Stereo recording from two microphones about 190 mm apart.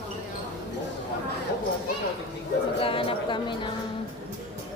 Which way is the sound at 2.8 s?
30° left (ahead or behind).